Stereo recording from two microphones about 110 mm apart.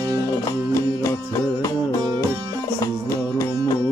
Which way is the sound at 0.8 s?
30° left (ahead or behind).